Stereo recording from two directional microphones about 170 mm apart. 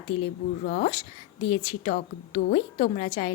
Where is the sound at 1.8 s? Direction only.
40° left (ahead or behind).